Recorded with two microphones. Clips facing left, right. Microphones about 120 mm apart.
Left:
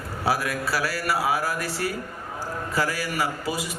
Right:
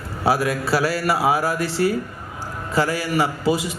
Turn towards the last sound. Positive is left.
turn(degrees=-25)  # may be behind; listen again after turning